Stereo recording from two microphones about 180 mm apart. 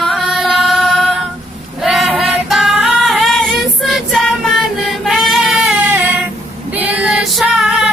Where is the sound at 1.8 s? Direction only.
Centre (ahead or behind).